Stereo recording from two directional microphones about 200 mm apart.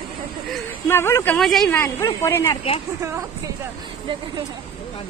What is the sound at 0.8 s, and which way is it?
Speech, 10° left (ahead or behind).